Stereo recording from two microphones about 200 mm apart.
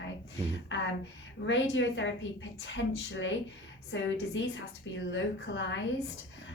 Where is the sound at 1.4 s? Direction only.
65° left (ahead or behind).